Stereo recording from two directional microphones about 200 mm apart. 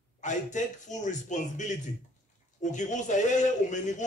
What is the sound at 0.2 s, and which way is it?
A man's voice, 35° left (ahead or behind).